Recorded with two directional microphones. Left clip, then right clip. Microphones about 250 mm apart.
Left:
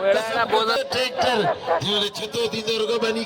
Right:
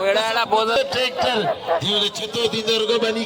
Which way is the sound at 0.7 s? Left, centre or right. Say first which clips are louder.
Right 3 dB; left.